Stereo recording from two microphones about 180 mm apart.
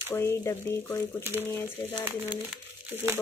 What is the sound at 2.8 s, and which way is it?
Speech, 15° right (ahead or behind).